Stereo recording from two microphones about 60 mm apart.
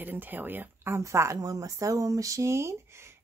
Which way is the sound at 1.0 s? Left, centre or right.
Right.